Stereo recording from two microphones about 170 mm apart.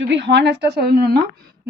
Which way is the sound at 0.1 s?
90° right.